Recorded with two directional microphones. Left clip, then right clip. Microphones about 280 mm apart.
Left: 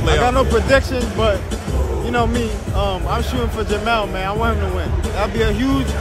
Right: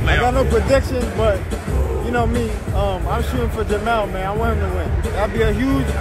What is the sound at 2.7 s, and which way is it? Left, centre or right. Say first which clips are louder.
Speech: left 1 dB; centre.